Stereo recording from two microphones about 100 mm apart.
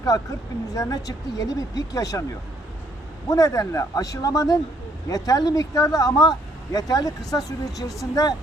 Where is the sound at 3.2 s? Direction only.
35° left (ahead or behind).